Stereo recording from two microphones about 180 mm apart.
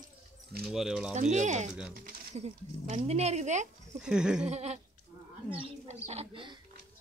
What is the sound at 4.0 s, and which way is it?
Speech, 5° right (ahead or behind).